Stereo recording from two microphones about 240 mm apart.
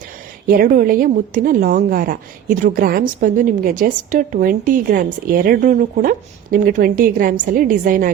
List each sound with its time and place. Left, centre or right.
0.4 s a woman's voice: right